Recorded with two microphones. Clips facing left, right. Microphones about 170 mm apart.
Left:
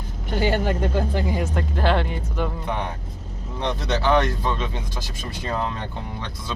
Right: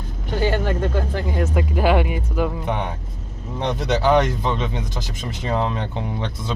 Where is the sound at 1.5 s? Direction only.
10° right (ahead or behind).